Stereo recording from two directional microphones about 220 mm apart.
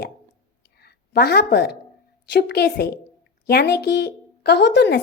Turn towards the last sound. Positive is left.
turn(degrees=50)  # may be behind; listen again after turning